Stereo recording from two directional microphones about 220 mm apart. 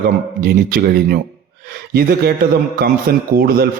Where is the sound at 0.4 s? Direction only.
45° right (ahead or behind).